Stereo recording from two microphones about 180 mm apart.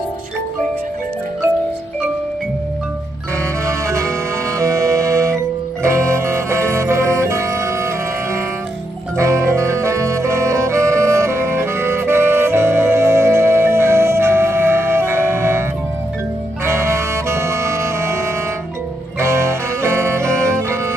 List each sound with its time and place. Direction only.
3.6 s music: 15° right (ahead or behind)
9.1 s music: 15° right (ahead or behind)
16.6 s music: 15° right (ahead or behind)